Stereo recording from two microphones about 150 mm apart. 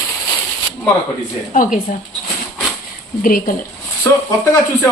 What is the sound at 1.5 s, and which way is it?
Speech, 60° left (ahead or behind).